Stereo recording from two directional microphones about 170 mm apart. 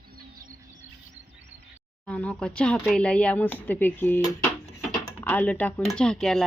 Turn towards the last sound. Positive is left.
turn(degrees=0)  # may be behind; listen again after turning